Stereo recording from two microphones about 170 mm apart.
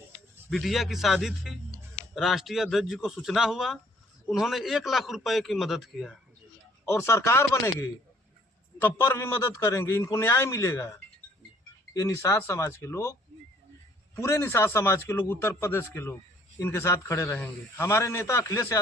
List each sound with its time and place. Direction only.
0.5 s a man's voice: centre (ahead or behind)
6.8 s a man's voice: 15° left (ahead or behind)
8.8 s a man's voice: 15° left (ahead or behind)
11.9 s a man's voice: 15° left (ahead or behind)
14.2 s a man's voice: 15° left (ahead or behind)